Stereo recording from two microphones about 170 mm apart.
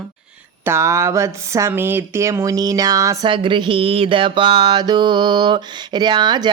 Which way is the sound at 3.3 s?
30° right (ahead or behind).